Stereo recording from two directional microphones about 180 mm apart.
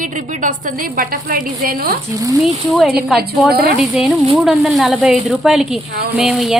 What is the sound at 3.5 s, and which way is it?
Speech, 60° right (ahead or behind).